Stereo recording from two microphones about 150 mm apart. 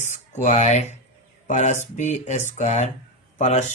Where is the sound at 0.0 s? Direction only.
55° left (ahead or behind).